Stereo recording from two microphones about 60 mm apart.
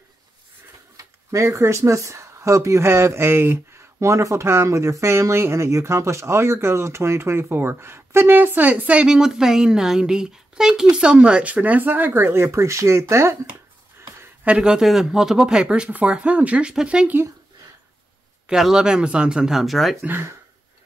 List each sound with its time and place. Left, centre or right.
0.9 s speech: right
4.0 s speech: right
4.5 s speech: right
14.6 s speech: centre
18.5 s speech: centre